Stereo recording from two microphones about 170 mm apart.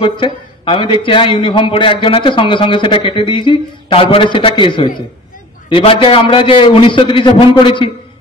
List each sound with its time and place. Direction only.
0.0 s a man's voice: 30° left (ahead or behind)